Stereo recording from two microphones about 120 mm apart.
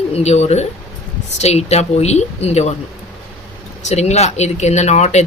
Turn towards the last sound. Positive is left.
turn(degrees=70)  # may be behind; listen again after turning